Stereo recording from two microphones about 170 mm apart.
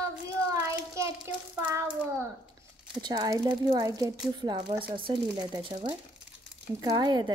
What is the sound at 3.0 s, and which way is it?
Speech, 25° right (ahead or behind).